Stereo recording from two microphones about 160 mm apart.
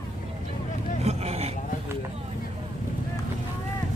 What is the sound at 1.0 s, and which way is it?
Vehicle, 40° right (ahead or behind).